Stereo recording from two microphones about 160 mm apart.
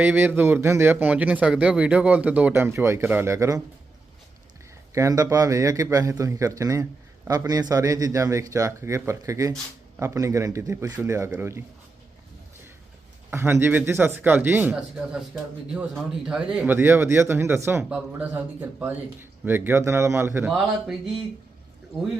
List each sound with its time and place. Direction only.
0.0 s speech: 10° right (ahead or behind)
4.9 s speech: 20° right (ahead or behind)
13.3 s speech: 15° right (ahead or behind)
20.4 s speech: 5° right (ahead or behind)